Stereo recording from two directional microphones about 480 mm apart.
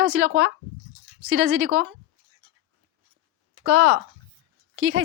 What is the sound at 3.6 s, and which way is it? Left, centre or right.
Speech, right.